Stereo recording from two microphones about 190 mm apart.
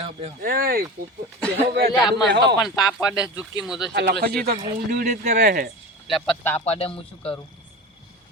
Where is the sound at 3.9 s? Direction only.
60° right (ahead or behind).